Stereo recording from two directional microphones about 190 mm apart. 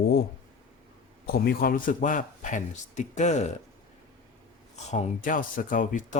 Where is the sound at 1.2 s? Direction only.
50° left (ahead or behind).